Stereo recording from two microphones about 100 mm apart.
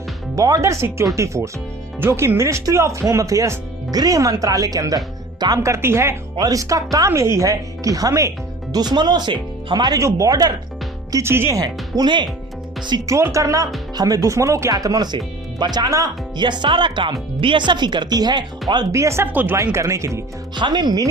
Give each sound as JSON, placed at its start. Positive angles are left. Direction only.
{"t": 0.3, "sound": "speech", "side_deg": -35}
{"t": 6.3, "sound": "speech", "side_deg": -40}
{"t": 11.1, "sound": "speech", "side_deg": -25}
{"t": 11.6, "sound": "speech", "side_deg": -45}
{"t": 13.1, "sound": "speech", "side_deg": -30}
{"t": 16.4, "sound": "speech", "side_deg": -50}
{"t": 18.9, "sound": "speech", "side_deg": -30}
{"t": 19.7, "sound": "speech", "side_deg": -30}
{"t": 20.6, "sound": "speech", "side_deg": -50}